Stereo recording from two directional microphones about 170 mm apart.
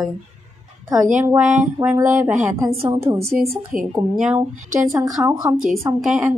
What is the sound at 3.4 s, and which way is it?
Speech, 55° right (ahead or behind).